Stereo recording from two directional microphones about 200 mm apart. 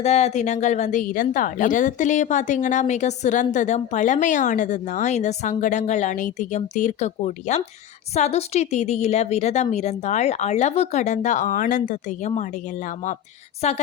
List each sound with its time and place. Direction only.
0.0 s a woman's voice: 35° left (ahead or behind)